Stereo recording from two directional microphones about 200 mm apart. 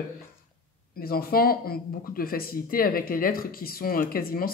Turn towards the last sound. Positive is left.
turn(degrees=50)  # may be behind; listen again after turning